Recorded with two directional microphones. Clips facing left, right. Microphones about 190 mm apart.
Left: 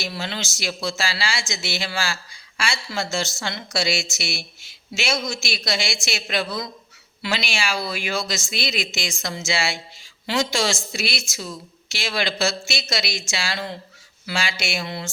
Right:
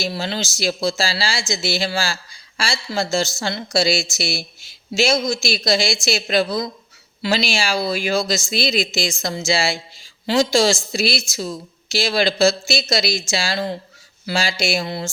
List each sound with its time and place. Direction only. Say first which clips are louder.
0.0 s speech: right 5 dB; 35° right (ahead or behind)